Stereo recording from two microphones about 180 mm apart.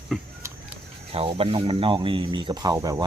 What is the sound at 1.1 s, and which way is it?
Speech, 30° right (ahead or behind).